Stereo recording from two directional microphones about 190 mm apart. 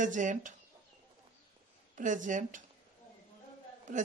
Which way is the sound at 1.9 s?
45° right (ahead or behind).